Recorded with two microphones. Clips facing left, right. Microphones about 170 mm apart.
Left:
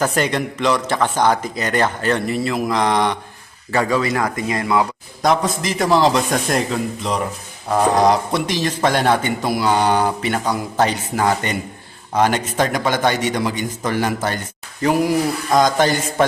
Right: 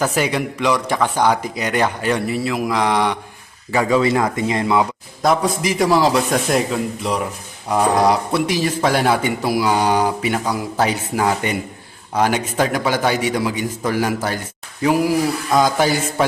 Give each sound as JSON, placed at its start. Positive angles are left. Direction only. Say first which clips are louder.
{"t": 0.0, "sound": "speech", "louder": "even", "side_deg": -10}
{"t": 4.0, "sound": "speech", "louder": "right 3 dB", "side_deg": -25}
{"t": 5.2, "sound": "a man's voice", "louder": "right 1 dB", "side_deg": -5}